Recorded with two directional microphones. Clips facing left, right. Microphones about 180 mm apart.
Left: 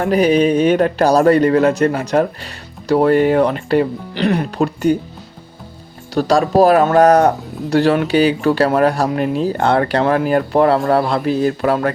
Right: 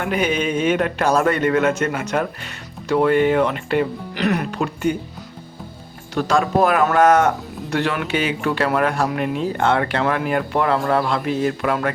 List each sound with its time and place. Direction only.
0.0 s speech: 35° left (ahead or behind)
6.1 s speech: 35° left (ahead or behind)